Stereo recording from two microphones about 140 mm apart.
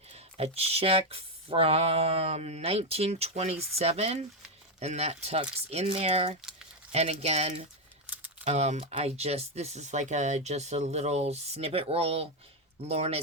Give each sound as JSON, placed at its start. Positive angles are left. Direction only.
{"t": 0.1, "sound": "speech", "side_deg": -50}